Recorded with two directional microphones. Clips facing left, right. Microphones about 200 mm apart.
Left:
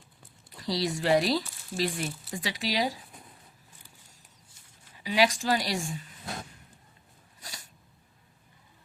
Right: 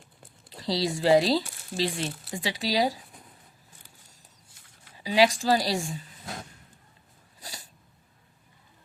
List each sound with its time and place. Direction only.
0.5 s a woman's voice: 30° right (ahead or behind)
5.0 s a woman's voice: 30° right (ahead or behind)
7.3 s sneeze: 30° right (ahead or behind)